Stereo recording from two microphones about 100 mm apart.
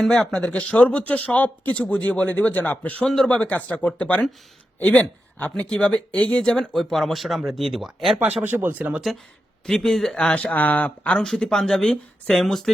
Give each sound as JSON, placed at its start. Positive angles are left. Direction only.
{"t": 0.0, "sound": "a man's voice", "side_deg": 5}
{"t": 8.4, "sound": "speech", "side_deg": -20}
{"t": 9.6, "sound": "speech", "side_deg": 5}